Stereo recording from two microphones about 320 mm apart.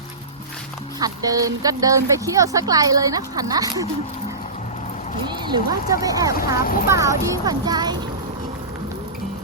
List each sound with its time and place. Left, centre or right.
0.9 s speech: centre
5.3 s speech: centre
6.3 s speech: left
6.8 s speech: centre